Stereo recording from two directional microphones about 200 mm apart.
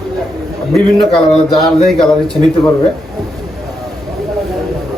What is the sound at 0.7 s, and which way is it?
Speech, centre (ahead or behind).